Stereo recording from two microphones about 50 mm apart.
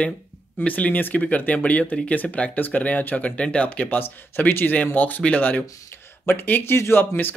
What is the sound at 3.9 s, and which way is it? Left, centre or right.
Speech, left.